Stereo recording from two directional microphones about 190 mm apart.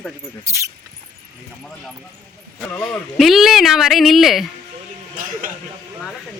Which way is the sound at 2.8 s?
Centre (ahead or behind).